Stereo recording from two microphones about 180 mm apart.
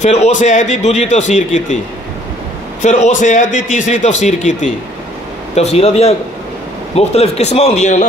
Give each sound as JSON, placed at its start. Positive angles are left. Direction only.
{"t": 0.0, "sound": "a man's voice", "side_deg": 40}
{"t": 2.8, "sound": "a man's voice", "side_deg": 40}